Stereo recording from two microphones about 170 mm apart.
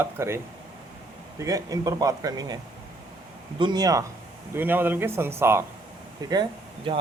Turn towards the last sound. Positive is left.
turn(degrees=-25)  # may be behind; listen again after turning